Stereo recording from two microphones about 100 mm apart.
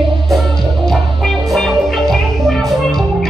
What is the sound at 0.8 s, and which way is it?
Music, 5° left (ahead or behind).